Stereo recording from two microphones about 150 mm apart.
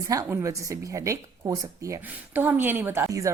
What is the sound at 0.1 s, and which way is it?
Speech, 20° right (ahead or behind).